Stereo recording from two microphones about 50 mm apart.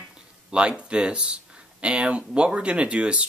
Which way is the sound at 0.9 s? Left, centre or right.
Right.